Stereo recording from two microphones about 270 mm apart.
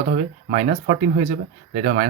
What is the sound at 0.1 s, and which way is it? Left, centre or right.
Speech, right.